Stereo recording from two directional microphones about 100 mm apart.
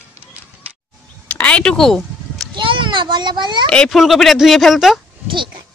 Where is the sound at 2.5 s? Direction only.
55° right (ahead or behind).